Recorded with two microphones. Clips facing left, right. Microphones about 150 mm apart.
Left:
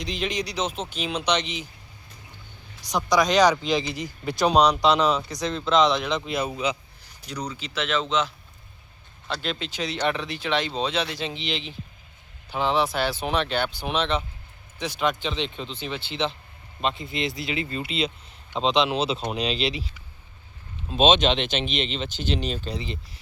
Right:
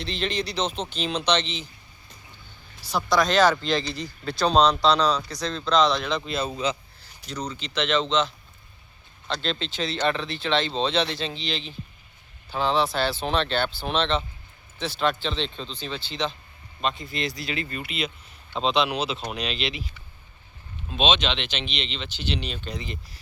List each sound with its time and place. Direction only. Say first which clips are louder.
0.0 s speech: even; 10° left (ahead or behind)
2.9 s speech: left 1 dB; 15° left (ahead or behind); by 19.9 s 35° left (ahead or behind)
20.9 s speech: left 5 dB; 45° left (ahead or behind); by 23.0 s 30° left (ahead or behind)